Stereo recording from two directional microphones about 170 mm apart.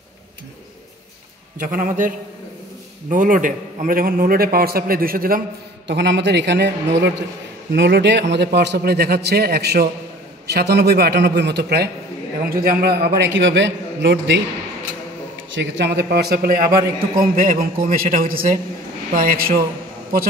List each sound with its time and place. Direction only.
1.6 s a man's voice: 50° right (ahead or behind)
5.9 s a man's voice: 90° right; by 11.9 s 75° right (ahead or behind)
12.4 s a man's voice: 60° right (ahead or behind); by 14.4 s 90° right
15.5 s a man's voice: 90° right; by 19.6 s 60° right (ahead or behind)